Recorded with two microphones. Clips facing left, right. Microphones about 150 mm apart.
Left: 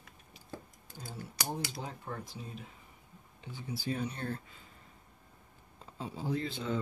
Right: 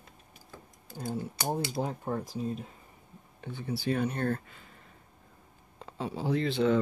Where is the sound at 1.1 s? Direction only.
50° right (ahead or behind).